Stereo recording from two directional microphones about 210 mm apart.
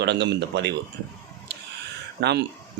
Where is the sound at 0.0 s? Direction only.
55° right (ahead or behind).